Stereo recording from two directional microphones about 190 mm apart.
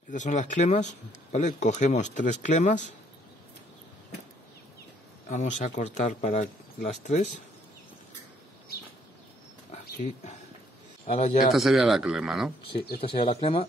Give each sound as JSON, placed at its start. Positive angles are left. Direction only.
{"t": 0.1, "sound": "speech", "side_deg": 40}
{"t": 5.3, "sound": "speech", "side_deg": 40}
{"t": 10.0, "sound": "speech", "side_deg": 35}
{"t": 11.5, "sound": "speech", "side_deg": 0}
{"t": 13.0, "sound": "speech", "side_deg": 30}